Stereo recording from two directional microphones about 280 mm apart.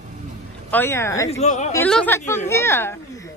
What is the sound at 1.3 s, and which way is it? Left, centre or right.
Speech, left.